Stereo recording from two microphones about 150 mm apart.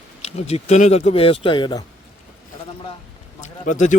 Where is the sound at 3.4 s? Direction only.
55° left (ahead or behind).